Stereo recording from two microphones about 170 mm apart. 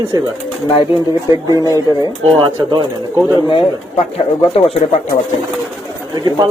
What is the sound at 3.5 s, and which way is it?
Speech, 30° left (ahead or behind).